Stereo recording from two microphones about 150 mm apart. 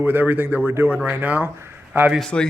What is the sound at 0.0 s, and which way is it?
Speech, 15° right (ahead or behind).